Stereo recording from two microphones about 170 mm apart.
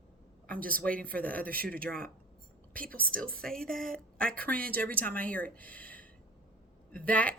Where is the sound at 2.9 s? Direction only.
55° right (ahead or behind).